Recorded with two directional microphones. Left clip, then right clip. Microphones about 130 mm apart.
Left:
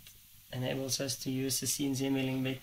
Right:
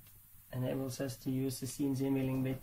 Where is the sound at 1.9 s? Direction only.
50° left (ahead or behind).